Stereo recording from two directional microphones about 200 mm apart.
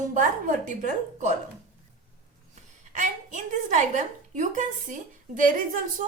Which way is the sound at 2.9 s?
40° right (ahead or behind).